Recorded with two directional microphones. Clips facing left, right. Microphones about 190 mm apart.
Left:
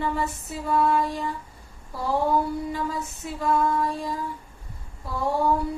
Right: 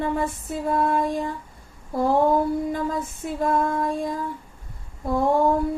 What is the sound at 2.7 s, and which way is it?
A woman's voice, 50° right (ahead or behind).